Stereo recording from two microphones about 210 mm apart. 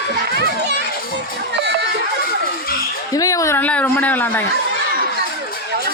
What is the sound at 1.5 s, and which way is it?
Crowd, 55° right (ahead or behind).